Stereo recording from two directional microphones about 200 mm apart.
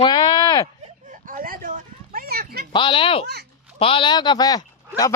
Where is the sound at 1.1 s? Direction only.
45° right (ahead or behind).